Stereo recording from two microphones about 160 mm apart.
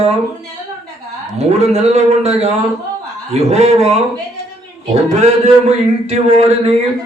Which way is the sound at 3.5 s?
40° right (ahead or behind).